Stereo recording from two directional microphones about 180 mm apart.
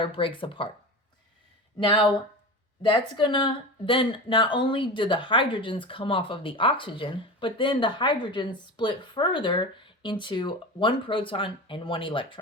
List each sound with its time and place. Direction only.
0.0 s speech: 30° left (ahead or behind)
1.8 s speech: 25° left (ahead or behind)